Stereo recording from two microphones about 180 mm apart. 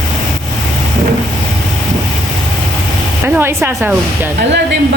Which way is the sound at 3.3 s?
15° right (ahead or behind).